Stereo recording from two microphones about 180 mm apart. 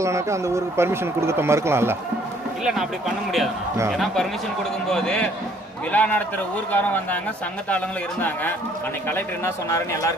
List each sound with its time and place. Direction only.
0.0 s speech: 15° right (ahead or behind)
3.9 s a man's voice: centre (ahead or behind)
9.7 s speech: 15° left (ahead or behind)